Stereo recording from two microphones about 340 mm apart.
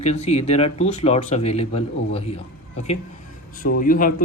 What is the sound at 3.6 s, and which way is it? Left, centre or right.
Speech, left.